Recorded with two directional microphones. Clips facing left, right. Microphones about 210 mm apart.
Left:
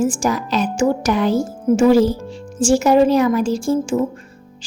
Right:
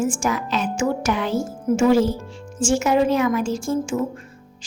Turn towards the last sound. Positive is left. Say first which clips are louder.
# left 5 dB
turn(degrees=35)  # may be behind; listen again after turning